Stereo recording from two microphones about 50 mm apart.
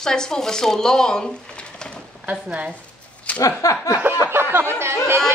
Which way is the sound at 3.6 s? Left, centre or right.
Left.